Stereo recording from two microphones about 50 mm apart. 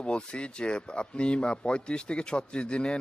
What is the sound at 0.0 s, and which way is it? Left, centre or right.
Speech, centre.